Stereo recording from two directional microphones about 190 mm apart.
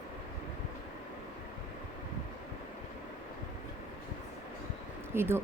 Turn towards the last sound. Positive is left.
turn(degrees=-10)  # may be behind; listen again after turning